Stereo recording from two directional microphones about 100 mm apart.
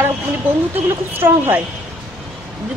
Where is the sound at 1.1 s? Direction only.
20° right (ahead or behind).